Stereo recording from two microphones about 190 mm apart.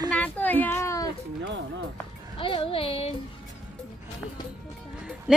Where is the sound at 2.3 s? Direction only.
25° left (ahead or behind).